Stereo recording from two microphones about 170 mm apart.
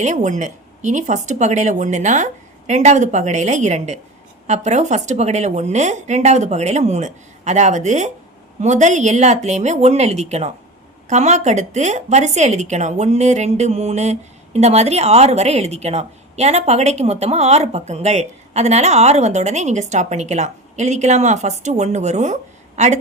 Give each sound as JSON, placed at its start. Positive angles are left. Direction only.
{"t": 0.0, "sound": "a woman's voice", "side_deg": -45}